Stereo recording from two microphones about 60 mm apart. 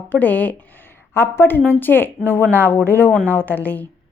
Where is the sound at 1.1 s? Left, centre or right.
Left.